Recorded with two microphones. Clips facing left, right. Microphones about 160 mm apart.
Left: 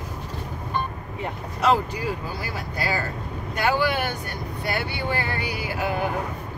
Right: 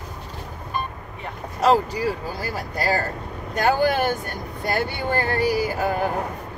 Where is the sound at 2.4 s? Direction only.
45° right (ahead or behind).